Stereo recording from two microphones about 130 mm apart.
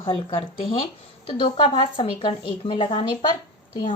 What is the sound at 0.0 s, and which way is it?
Speech, 40° left (ahead or behind).